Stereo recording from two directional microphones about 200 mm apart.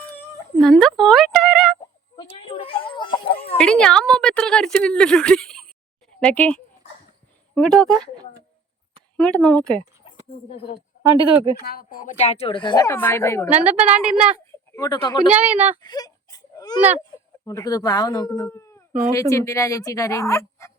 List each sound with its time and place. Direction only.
0.6 s a sound: centre (ahead or behind)
2.3 s a sound: 25° left (ahead or behind)
3.6 s a sound: 5° left (ahead or behind)
6.1 s a woman's voice: 5° left (ahead or behind)
9.1 s a woman's voice: 5° left (ahead or behind)
10.1 s a sound: 25° left (ahead or behind)
11.0 s speech: 20° right (ahead or behind)
11.6 s a woman's voice: 50° left (ahead or behind); by 13.5 s 15° left (ahead or behind)
13.5 s a woman's voice: 5° right (ahead or behind)
14.8 s a woman's voice: 20° left (ahead or behind)
15.3 s speech: 5° right (ahead or behind)
15.8 s whimper: 20° left (ahead or behind)
17.4 s a woman's voice: 15° left (ahead or behind)